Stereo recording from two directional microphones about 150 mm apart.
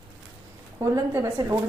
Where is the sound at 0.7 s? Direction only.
20° right (ahead or behind).